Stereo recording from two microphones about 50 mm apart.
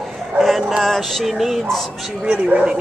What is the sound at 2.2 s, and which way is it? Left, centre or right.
Speech, right.